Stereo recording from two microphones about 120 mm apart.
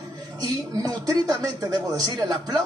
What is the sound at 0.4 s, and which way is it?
Speech, 30° right (ahead or behind).